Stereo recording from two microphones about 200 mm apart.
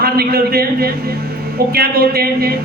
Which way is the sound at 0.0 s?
50° right (ahead or behind).